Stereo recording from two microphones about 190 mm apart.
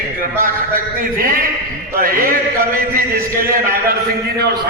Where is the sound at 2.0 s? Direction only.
50° right (ahead or behind).